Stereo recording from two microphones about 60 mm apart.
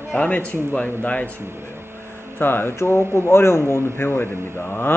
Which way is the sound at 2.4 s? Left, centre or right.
Left.